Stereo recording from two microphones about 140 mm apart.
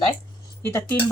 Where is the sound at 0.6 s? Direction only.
20° left (ahead or behind).